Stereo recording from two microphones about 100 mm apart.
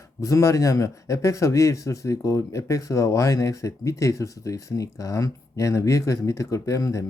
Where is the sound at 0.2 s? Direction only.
30° left (ahead or behind).